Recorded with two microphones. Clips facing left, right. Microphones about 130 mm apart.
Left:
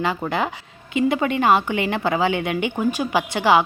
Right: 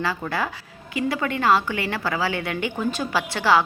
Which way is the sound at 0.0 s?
20° left (ahead or behind).